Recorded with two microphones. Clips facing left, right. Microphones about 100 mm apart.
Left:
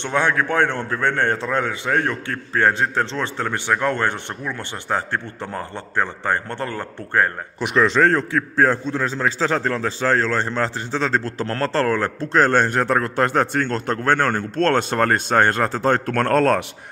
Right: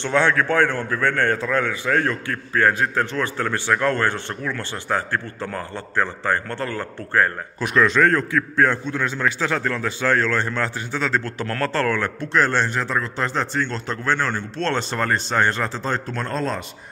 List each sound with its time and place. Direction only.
0.0 s a man's voice: 15° left (ahead or behind); by 16.6 s 65° left (ahead or behind)